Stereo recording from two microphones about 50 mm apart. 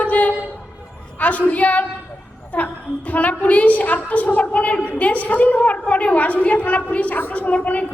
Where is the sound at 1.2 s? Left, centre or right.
Left.